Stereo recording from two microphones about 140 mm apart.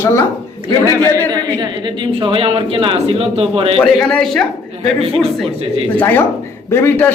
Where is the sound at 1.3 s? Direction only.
30° right (ahead or behind).